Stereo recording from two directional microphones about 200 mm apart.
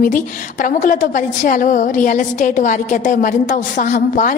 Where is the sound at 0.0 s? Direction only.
40° left (ahead or behind).